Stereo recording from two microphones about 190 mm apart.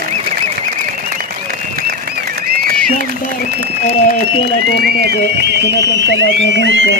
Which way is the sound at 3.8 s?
35° left (ahead or behind).